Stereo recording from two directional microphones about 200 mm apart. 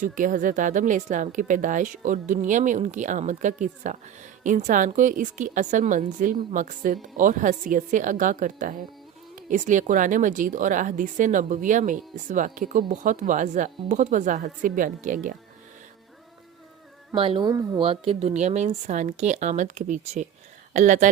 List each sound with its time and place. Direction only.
0.0 s speech: 40° right (ahead or behind)
17.1 s speech: 25° right (ahead or behind)